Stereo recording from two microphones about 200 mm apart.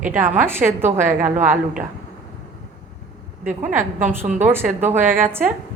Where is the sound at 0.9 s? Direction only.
40° right (ahead or behind).